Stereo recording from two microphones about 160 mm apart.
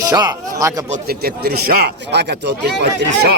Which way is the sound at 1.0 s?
75° right (ahead or behind).